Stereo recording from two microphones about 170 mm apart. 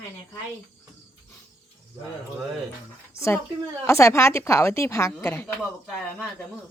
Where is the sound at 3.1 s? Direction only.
15° left (ahead or behind).